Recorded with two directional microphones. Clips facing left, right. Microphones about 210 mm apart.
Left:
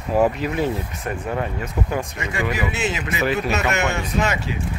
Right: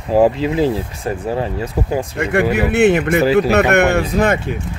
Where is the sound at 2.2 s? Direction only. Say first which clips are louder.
Right 9 dB; 60° right (ahead or behind).